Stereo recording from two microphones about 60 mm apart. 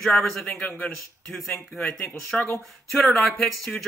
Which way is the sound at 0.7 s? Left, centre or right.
Left.